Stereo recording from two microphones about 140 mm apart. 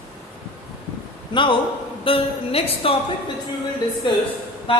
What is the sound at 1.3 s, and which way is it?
A man's voice, 35° left (ahead or behind).